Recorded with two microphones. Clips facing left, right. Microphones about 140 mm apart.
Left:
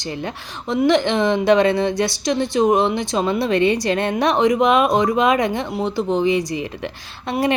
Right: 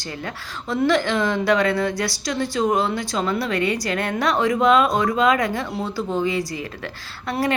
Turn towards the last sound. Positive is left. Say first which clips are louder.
# left 3 dB
turn(degrees=20)  # may be behind; listen again after turning